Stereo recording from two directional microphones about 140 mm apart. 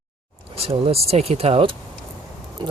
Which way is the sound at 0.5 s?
45° right (ahead or behind).